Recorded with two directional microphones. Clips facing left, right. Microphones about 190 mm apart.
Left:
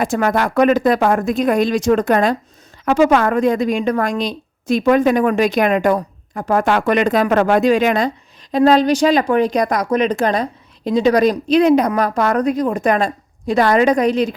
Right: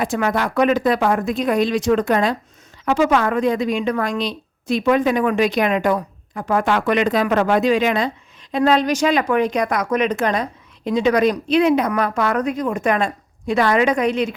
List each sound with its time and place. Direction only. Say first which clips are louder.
0.0 s a woman's voice: left 3 dB; 45° left (ahead or behind)